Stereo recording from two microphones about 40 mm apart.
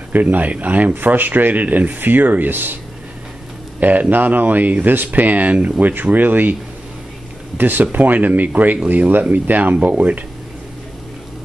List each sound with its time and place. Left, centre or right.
0.1 s speech: right
0.9 s speech: right
3.8 s speech: right
7.5 s speech: right